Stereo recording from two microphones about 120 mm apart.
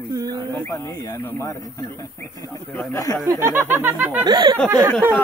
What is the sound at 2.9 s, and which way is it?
Speech, 25° left (ahead or behind).